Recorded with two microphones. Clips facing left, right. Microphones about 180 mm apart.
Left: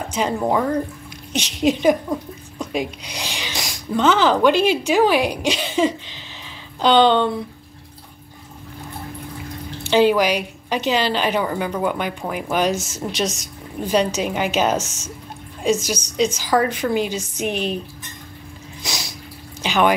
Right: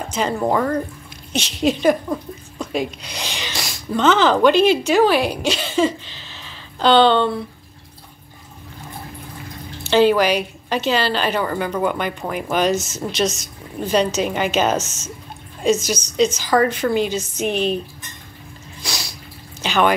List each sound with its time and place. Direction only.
0.1 s a woman's voice: 10° left (ahead or behind)
9.8 s a woman's voice: 10° left (ahead or behind)
18.8 s a sound: 20° left (ahead or behind)